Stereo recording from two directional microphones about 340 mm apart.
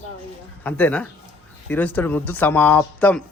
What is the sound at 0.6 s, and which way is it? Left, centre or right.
A man's voice, centre.